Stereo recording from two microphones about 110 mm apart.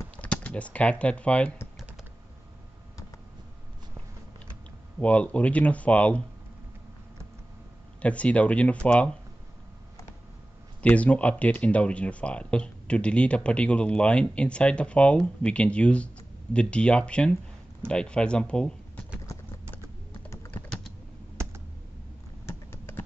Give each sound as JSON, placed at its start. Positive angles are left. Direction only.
{"t": 0.2, "sound": "speech", "side_deg": 15}
{"t": 5.0, "sound": "speech", "side_deg": 10}
{"t": 8.0, "sound": "speech", "side_deg": 10}
{"t": 10.8, "sound": "speech", "side_deg": 10}
{"t": 21.4, "sound": "computer keyboard", "side_deg": -25}
{"t": 22.5, "sound": "typing", "side_deg": 20}